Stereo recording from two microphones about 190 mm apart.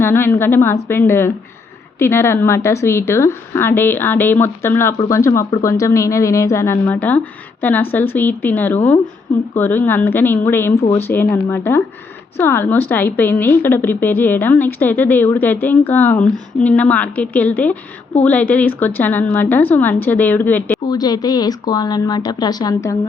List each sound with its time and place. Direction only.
0.0 s speech: 10° left (ahead or behind)
20.8 s speech: 20° left (ahead or behind)